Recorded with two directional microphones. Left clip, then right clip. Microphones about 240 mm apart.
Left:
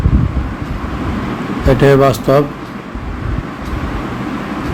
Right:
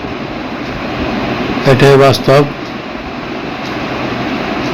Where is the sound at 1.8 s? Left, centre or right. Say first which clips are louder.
Right 3 dB; centre.